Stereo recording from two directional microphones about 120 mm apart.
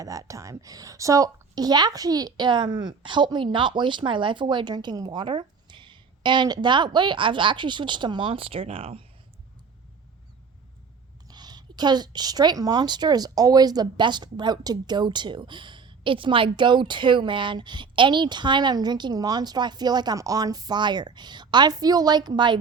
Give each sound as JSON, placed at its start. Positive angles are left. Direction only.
{"t": 0.0, "sound": "a woman's voice", "side_deg": -30}
{"t": 11.3, "sound": "a woman's voice", "side_deg": -35}